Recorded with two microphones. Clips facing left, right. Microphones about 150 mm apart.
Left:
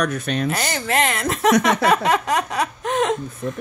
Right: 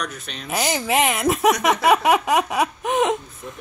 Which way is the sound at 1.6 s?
10° right (ahead or behind).